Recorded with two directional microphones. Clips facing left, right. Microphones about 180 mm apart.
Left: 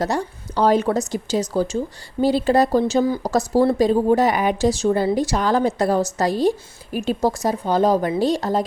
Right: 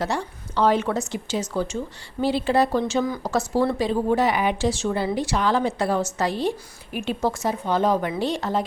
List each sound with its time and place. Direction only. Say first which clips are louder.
0.0 s speech: left 4 dB; 40° left (ahead or behind)